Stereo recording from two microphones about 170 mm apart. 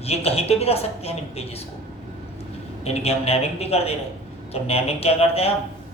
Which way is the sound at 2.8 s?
35° left (ahead or behind).